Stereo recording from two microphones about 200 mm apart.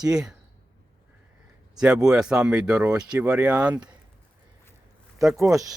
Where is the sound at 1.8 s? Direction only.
5° right (ahead or behind).